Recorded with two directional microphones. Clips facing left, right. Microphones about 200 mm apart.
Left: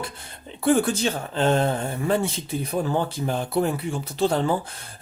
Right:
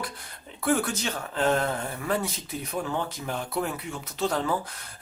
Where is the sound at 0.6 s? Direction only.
30° left (ahead or behind).